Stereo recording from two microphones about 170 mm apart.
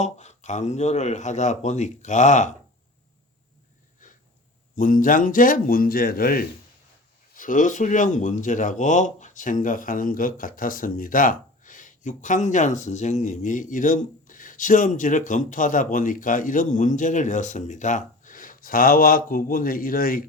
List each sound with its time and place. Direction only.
0.0 s speech: 40° left (ahead or behind)
4.8 s speech: 55° left (ahead or behind)
7.3 s speech: 50° left (ahead or behind)